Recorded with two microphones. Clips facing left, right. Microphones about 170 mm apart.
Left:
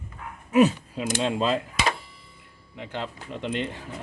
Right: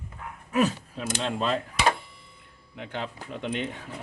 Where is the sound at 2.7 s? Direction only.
Centre (ahead or behind).